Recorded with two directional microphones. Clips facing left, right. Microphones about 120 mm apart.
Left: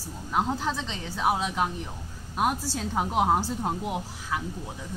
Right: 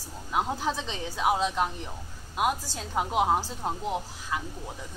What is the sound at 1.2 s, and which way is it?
Speech, centre (ahead or behind).